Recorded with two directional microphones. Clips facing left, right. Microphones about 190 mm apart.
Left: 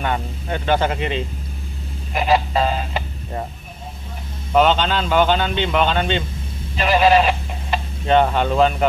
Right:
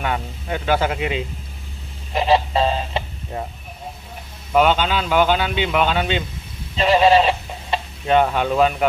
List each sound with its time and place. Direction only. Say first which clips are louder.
0.0 s speech: left 1 dB; 5° right (ahead or behind)
2.1 s a sound: right 1 dB; 25° right (ahead or behind)
4.6 s a man's voice: left 1 dB; 10° right (ahead or behind)
6.8 s fowl: right 1 dB; 30° right (ahead or behind)
8.1 s speech: left 1 dB; 5° right (ahead or behind)